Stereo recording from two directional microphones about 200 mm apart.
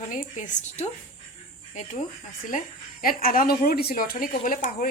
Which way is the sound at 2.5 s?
40° left (ahead or behind).